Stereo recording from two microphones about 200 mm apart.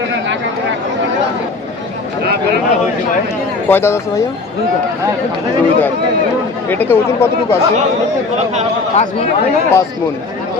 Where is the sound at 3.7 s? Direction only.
10° left (ahead or behind).